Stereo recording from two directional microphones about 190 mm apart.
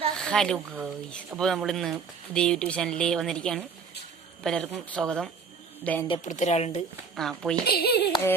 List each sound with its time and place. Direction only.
0.2 s a woman's voice: 5° left (ahead or behind)
6.2 s a woman's voice: 40° left (ahead or behind)
7.2 s speech: centre (ahead or behind)
7.7 s a sound: 55° left (ahead or behind)